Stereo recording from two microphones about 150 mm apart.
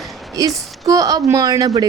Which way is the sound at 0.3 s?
25° right (ahead or behind).